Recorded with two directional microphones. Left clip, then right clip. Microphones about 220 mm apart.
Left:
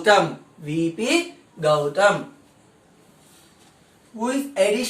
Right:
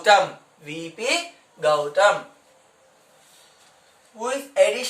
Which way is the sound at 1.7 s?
15° right (ahead or behind).